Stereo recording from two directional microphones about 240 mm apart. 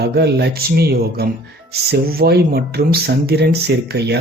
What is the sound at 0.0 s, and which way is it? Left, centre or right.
Speech, right.